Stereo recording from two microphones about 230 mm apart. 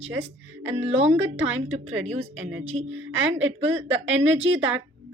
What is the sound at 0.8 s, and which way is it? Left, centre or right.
Speech, right.